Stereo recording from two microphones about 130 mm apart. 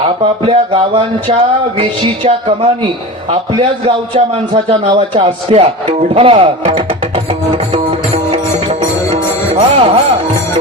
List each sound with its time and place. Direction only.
0.4 s speech: 40° right (ahead or behind)
7.5 s music: 50° right (ahead or behind)
9.6 s speech: 45° right (ahead or behind)